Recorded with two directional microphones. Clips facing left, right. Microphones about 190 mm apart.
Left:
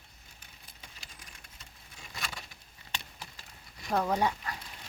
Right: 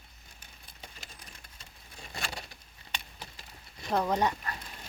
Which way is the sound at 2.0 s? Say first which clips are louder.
Right 3 dB; 35° right (ahead or behind).